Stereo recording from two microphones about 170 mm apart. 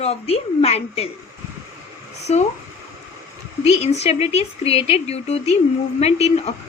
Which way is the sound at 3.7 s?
40° left (ahead or behind).